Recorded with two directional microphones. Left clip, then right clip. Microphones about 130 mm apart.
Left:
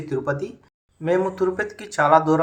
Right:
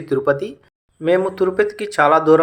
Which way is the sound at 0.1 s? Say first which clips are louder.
Right 8 dB; 30° right (ahead or behind).